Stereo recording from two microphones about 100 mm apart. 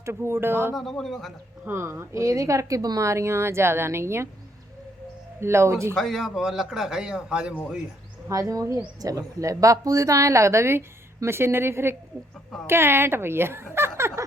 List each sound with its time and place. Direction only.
0.0 s speech: 25° right (ahead or behind)
0.8 s a man's voice: 5° left (ahead or behind)
1.6 s speech: 25° right (ahead or behind)
5.4 s speech: 25° right (ahead or behind)
6.0 s a man's voice: centre (ahead or behind)
8.3 s a woman's voice: 35° right (ahead or behind)
13.7 s a sound: 25° right (ahead or behind)